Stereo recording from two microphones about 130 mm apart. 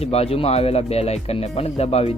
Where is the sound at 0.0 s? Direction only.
50° left (ahead or behind).